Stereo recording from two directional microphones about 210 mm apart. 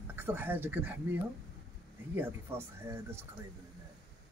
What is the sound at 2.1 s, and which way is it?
Speech, 10° right (ahead or behind).